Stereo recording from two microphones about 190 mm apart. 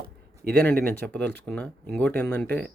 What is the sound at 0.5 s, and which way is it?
Speech, 5° left (ahead or behind).